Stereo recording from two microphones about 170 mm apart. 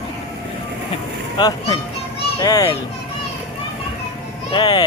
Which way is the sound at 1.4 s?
25° left (ahead or behind).